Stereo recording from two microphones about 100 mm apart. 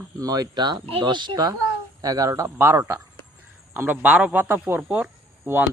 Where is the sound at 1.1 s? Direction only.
50° right (ahead or behind).